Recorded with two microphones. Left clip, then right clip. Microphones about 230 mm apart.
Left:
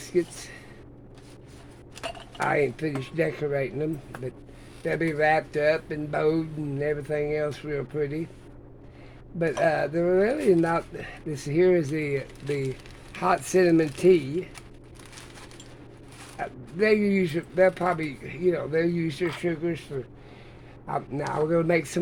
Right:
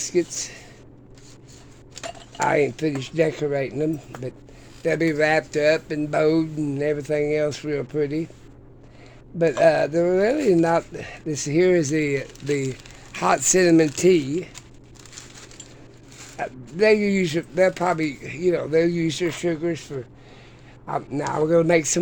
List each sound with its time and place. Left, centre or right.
0.0 s speech: right
2.4 s speech: right
9.4 s speech: right
16.4 s speech: right